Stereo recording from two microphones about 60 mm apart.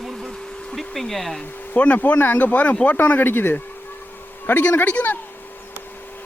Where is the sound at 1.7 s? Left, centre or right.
Left.